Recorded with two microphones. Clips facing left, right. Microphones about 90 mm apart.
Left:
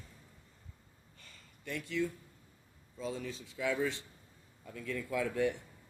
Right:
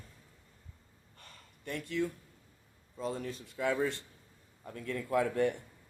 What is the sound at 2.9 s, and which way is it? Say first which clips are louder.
Speech: right 2 dB; 50° right (ahead or behind).